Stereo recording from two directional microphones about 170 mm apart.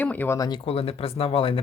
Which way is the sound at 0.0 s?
10° left (ahead or behind).